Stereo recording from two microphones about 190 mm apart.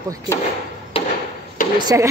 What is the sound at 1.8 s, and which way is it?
Speech, 20° right (ahead or behind).